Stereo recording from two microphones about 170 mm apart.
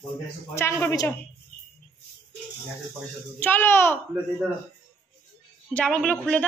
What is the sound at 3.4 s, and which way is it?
Speech, 10° left (ahead or behind).